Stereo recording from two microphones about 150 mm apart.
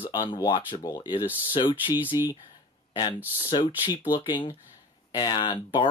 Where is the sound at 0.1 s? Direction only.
25° left (ahead or behind).